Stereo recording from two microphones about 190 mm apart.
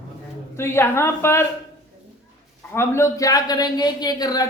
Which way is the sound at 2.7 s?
15° left (ahead or behind).